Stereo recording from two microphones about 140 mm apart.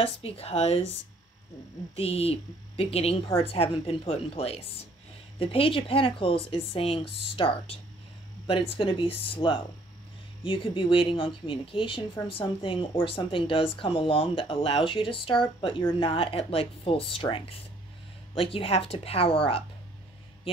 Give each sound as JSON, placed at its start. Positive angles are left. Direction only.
{"t": 0.0, "sound": "speech", "side_deg": 45}
{"t": 2.0, "sound": "speech", "side_deg": 45}